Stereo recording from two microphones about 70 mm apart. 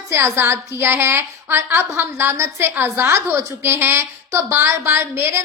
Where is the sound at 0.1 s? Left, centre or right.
Right.